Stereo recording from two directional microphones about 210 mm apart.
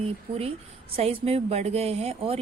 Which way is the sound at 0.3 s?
25° right (ahead or behind).